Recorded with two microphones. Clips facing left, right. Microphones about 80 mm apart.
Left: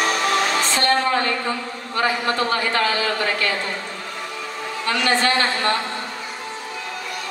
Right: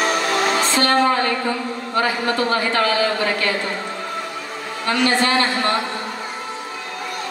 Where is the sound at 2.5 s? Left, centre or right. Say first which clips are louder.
Right 2 dB; right.